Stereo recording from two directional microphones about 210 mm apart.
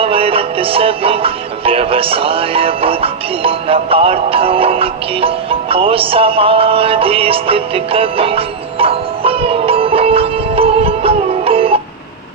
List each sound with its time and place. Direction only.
0.0 s music: 25° right (ahead or behind)